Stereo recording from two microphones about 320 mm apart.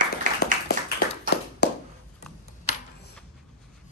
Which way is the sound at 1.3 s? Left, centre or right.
Left.